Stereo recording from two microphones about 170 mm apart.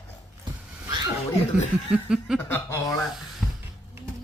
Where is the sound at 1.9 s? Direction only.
5° right (ahead or behind).